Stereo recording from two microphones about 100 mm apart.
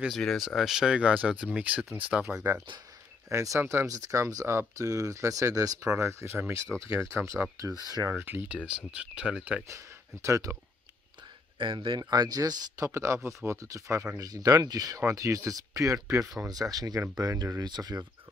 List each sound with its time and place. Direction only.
0.1 s speech: centre (ahead or behind)
3.3 s speech: 30° right (ahead or behind)
5.9 s speech: 25° right (ahead or behind)
8.5 s speech: 10° right (ahead or behind)
9.7 s speech: 30° right (ahead or behind)
11.5 s speech: 55° right (ahead or behind)
12.0 s speech: 40° right (ahead or behind)